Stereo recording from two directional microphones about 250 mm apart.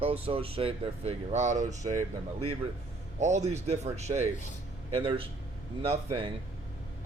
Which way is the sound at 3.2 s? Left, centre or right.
Right.